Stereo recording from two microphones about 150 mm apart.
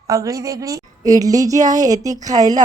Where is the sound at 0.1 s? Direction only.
20° right (ahead or behind).